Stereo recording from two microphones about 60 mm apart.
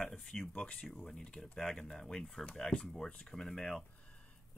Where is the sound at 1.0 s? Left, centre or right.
Centre.